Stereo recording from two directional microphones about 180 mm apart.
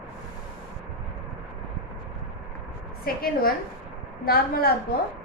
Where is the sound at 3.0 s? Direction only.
55° left (ahead or behind).